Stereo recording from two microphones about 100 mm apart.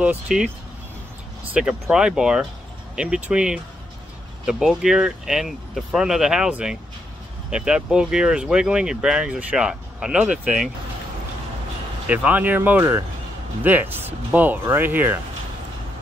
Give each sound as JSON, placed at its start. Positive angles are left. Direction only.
{"t": 0.3, "sound": "speech", "side_deg": -5}
{"t": 1.5, "sound": "speech", "side_deg": -10}
{"t": 12.1, "sound": "speech", "side_deg": -15}